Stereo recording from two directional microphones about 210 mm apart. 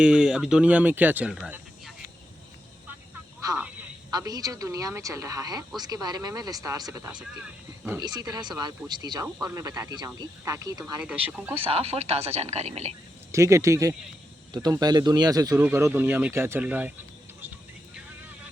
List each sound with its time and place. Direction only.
0.0 s speech: 5° right (ahead or behind)
3.4 s speech: 15° right (ahead or behind)
11.0 s speech: 5° right (ahead or behind)
11.6 s speech: 30° right (ahead or behind)
13.3 s speech: 15° right (ahead or behind)